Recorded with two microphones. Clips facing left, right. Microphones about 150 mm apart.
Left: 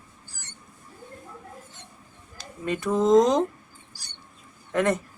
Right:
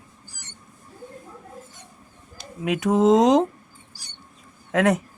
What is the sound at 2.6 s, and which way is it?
Speech, 90° right.